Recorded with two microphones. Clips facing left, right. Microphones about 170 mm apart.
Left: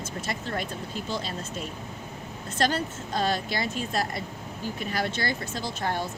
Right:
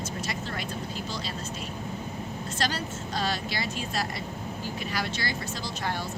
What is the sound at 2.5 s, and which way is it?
Speech, 50° left (ahead or behind).